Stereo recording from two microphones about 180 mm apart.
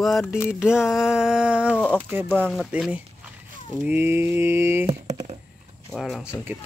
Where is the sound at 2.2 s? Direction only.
10° left (ahead or behind).